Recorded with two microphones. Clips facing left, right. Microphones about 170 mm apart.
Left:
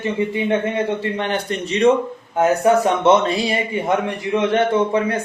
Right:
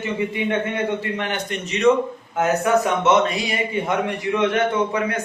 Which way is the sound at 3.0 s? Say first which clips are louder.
Left 3 dB; 30° left (ahead or behind).